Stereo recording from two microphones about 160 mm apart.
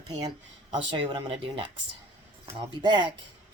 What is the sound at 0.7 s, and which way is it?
Speech, 30° right (ahead or behind).